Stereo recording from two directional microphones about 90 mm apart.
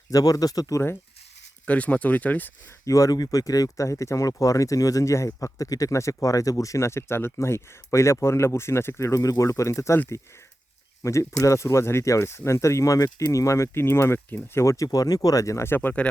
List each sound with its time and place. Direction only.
0.1 s speech: 45° left (ahead or behind)
1.6 s speech: 15° left (ahead or behind)
2.8 s speech: 35° left (ahead or behind)
11.0 s speech: 35° left (ahead or behind)